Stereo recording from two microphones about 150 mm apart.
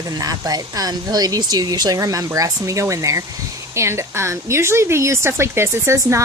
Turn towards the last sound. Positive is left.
turn(degrees=-20)  # may be behind; listen again after turning